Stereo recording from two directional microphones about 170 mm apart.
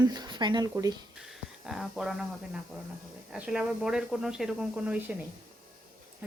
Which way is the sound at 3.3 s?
5° right (ahead or behind).